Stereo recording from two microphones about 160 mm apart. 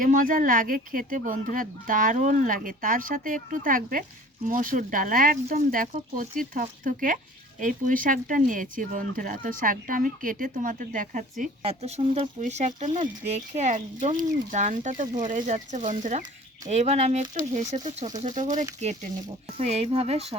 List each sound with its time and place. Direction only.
0.0 s speech: 55° right (ahead or behind)
11.6 s speech: 40° right (ahead or behind)
12.4 s speech: 45° right (ahead or behind)